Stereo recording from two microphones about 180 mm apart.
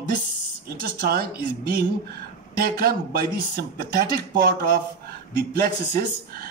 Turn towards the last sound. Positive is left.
turn(degrees=-60)  # may be behind; listen again after turning